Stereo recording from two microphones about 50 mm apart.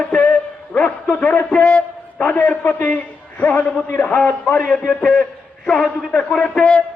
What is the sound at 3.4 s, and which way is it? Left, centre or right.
A man's voice, left.